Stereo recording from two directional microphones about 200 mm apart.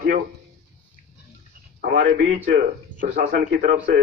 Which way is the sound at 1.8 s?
45° right (ahead or behind).